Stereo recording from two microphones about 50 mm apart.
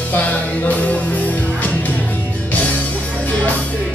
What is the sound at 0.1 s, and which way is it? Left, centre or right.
Music, left.